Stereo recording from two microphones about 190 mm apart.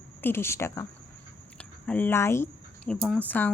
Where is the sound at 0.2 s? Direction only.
10° left (ahead or behind).